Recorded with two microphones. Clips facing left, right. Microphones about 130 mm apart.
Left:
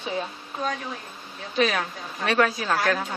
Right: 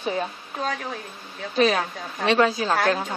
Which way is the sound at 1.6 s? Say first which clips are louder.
Right 3 dB; 30° right (ahead or behind).